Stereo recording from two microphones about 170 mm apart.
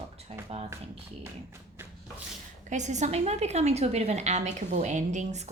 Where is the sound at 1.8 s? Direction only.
15° right (ahead or behind).